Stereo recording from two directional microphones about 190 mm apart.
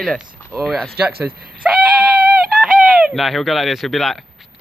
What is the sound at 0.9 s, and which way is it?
Speech, 55° right (ahead or behind).